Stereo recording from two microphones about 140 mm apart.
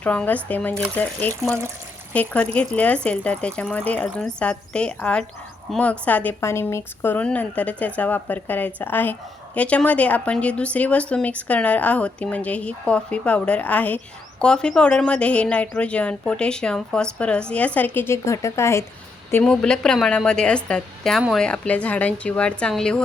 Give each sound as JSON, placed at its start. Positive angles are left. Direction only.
{"t": 0.0, "sound": "speech", "side_deg": 10}
{"t": 19.3, "sound": "speech", "side_deg": 10}